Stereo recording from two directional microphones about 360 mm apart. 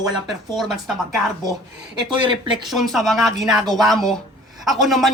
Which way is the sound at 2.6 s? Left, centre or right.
Centre.